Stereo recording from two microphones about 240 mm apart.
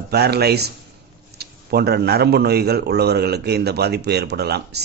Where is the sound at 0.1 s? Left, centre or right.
Right.